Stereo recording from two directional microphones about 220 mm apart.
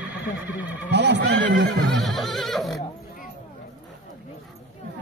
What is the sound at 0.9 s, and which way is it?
Speech, 50° right (ahead or behind).